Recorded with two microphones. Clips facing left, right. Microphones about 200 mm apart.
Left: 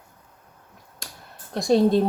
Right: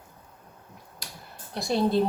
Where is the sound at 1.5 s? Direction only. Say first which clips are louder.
Left 6 dB; 45° left (ahead or behind).